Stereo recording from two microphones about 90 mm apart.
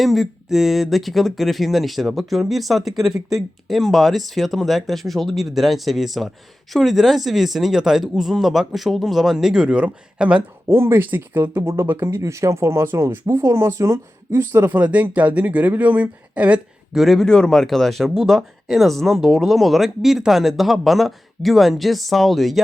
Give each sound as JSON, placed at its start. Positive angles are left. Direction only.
{"t": 0.0, "sound": "speech", "side_deg": 0}
{"t": 10.7, "sound": "speech", "side_deg": -25}
{"t": 14.6, "sound": "speech", "side_deg": -15}
{"t": 17.0, "sound": "speech", "side_deg": 0}